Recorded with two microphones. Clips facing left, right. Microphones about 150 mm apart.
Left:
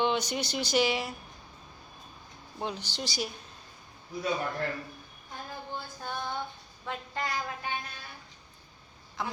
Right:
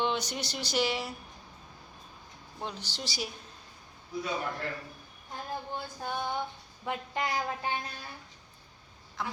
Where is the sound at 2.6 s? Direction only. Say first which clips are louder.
Left 3 dB; centre (ahead or behind).